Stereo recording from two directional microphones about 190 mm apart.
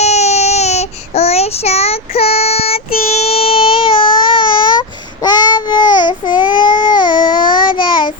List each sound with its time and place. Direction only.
0.0 s child singing: 35° left (ahead or behind)